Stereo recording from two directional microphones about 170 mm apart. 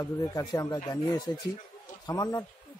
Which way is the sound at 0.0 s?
20° left (ahead or behind).